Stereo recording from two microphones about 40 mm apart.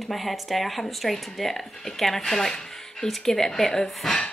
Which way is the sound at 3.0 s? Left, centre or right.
Centre.